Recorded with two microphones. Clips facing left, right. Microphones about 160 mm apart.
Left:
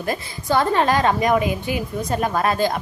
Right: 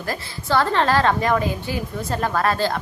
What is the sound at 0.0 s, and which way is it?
A woman's voice, 20° left (ahead or behind).